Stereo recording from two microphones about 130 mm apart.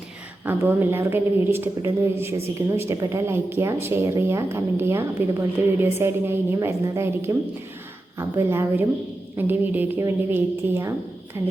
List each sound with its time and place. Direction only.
0.4 s a woman's voice: 15° right (ahead or behind)